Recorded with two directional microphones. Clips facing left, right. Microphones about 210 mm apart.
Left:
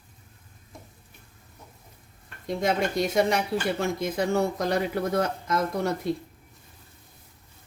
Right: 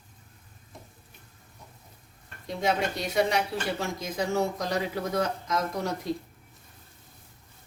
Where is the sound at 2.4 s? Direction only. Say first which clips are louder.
Left 2 dB; 50° left (ahead or behind).